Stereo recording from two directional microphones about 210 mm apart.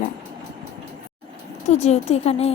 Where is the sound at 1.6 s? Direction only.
30° left (ahead or behind).